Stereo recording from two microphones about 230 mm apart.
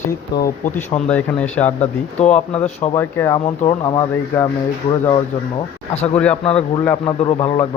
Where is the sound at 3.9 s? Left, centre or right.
Centre.